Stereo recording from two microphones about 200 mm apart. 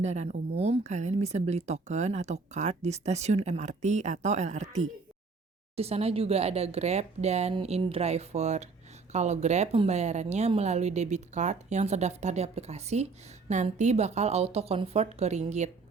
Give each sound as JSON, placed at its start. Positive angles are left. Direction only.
{"t": 0.0, "sound": "speech", "side_deg": -35}